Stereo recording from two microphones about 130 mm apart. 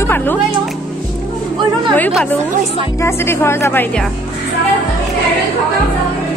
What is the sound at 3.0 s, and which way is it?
A woman's voice, 20° left (ahead or behind).